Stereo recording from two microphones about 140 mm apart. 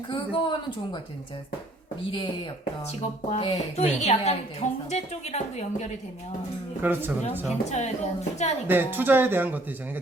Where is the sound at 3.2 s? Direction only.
50° left (ahead or behind).